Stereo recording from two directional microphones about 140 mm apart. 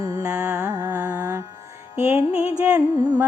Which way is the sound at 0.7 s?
25° right (ahead or behind).